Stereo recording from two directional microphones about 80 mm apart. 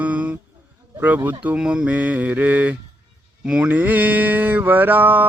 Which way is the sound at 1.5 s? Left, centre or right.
Centre.